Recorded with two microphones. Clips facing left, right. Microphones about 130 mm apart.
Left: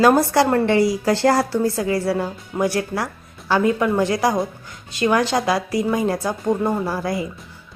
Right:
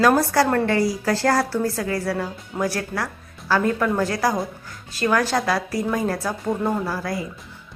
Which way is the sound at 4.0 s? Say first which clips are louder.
Left 3 dB; 20° left (ahead or behind).